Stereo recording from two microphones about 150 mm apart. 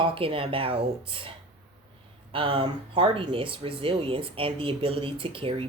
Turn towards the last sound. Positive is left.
turn(degrees=-35)  # may be behind; listen again after turning